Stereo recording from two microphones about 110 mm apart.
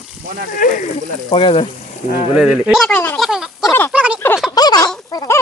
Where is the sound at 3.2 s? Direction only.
5° right (ahead or behind).